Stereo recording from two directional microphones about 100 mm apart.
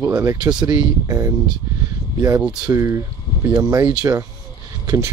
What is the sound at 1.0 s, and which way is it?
Speech, 30° right (ahead or behind).